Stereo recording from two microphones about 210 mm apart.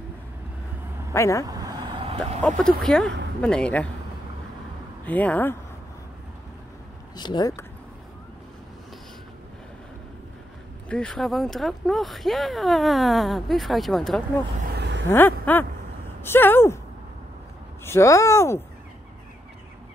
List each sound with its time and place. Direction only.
1.1 s speech: 15° left (ahead or behind)
5.0 s speech: 5° left (ahead or behind)
7.2 s speech: 20° left (ahead or behind)
10.9 s speech: 5° left (ahead or behind)
14.7 s a sound: 55° right (ahead or behind)
15.0 s a sound: 10° left (ahead or behind)
16.2 s speech: 10° left (ahead or behind)
17.8 s speech: 15° left (ahead or behind)